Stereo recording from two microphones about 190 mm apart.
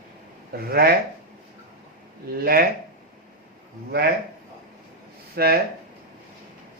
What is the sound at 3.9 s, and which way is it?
Speech, 55° right (ahead or behind).